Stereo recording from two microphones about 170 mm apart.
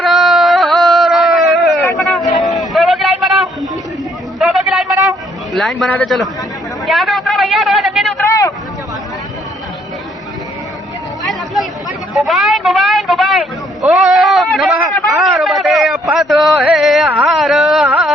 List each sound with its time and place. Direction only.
0.0 s a sound: centre (ahead or behind)
5.5 s a man's voice: centre (ahead or behind)
8.2 s vehicle: 20° left (ahead or behind)
12.1 s speech: centre (ahead or behind)
17.4 s carnatic music: centre (ahead or behind)